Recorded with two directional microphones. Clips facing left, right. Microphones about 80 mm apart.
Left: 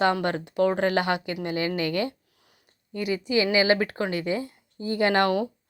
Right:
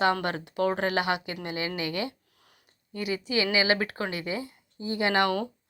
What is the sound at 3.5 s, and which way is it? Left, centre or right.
Speech, left.